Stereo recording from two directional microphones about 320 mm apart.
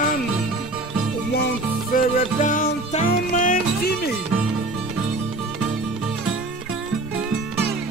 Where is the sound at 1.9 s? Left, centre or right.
Left.